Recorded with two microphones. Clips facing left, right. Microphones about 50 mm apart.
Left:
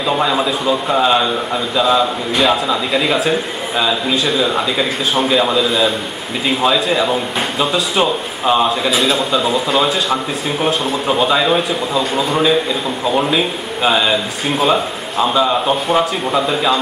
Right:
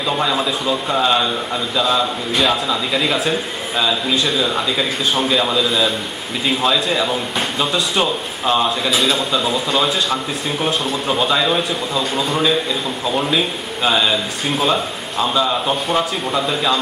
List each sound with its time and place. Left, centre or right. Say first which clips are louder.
0.1 s a man's voice: left 3 dB; centre